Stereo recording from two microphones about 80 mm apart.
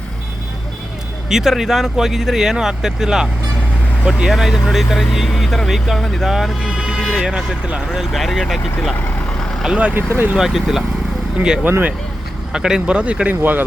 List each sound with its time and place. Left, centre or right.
1.3 s speech: centre
9.7 s speech: centre
10.3 s speech: centre
11.7 s speech: right
12.5 s speech: centre